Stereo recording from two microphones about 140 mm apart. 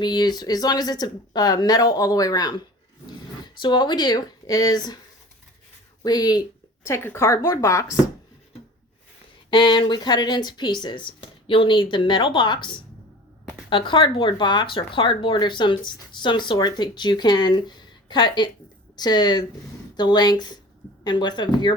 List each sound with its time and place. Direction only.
0.0 s speech: 30° left (ahead or behind)
6.0 s speech: 30° left (ahead or behind)
6.8 s speech: 15° left (ahead or behind)
9.5 s speech: 35° left (ahead or behind)